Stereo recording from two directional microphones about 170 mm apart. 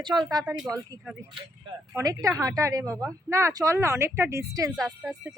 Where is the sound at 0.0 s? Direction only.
25° right (ahead or behind).